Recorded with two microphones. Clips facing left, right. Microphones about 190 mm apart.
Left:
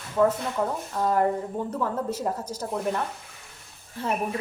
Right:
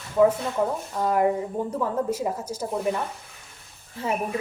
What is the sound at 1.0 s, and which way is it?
A woman's voice, 10° right (ahead or behind).